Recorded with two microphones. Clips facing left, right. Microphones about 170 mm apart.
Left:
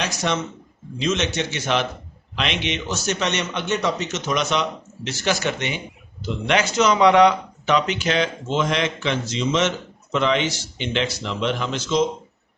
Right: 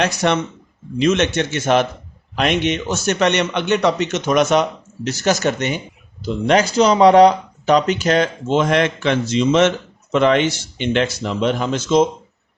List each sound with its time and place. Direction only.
0.0 s a man's voice: 60° right (ahead or behind)